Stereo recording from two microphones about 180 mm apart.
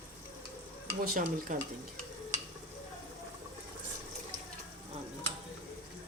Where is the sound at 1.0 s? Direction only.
45° right (ahead or behind).